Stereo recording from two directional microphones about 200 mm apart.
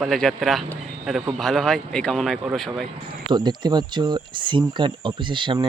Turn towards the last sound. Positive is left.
turn(degrees=-25)  # may be behind; listen again after turning